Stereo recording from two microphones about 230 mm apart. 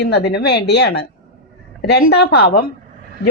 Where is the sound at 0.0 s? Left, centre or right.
Left.